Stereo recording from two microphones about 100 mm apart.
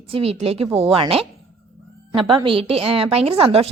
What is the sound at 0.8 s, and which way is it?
A woman's voice, 70° right (ahead or behind).